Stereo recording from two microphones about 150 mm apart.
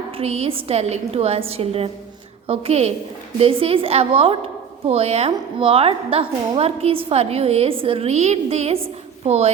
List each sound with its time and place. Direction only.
0.1 s a woman's voice: 40° right (ahead or behind)